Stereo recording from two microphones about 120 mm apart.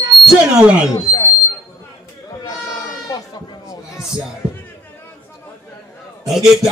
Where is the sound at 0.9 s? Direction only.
30° left (ahead or behind).